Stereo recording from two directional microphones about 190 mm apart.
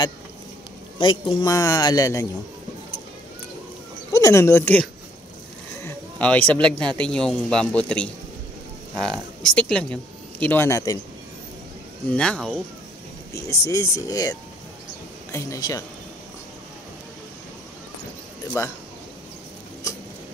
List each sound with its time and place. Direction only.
0.9 s speech: 20° left (ahead or behind)
4.1 s speech: 15° left (ahead or behind)
5.8 s a sound: 10° left (ahead or behind)
7.0 s speech: 5° left (ahead or behind)
12.2 s speech: centre (ahead or behind)
13.3 s speech: 15° left (ahead or behind)
18.6 s speech: 15° left (ahead or behind)